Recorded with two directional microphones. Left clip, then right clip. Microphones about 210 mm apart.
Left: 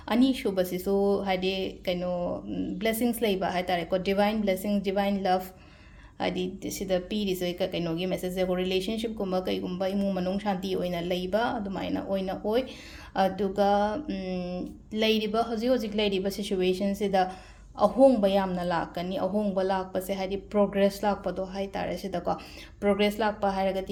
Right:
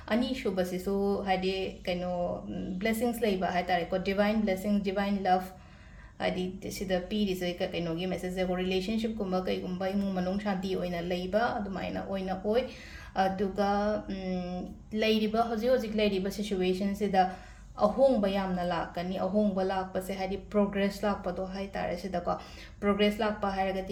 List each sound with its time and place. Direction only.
0.1 s a woman's voice: 40° left (ahead or behind)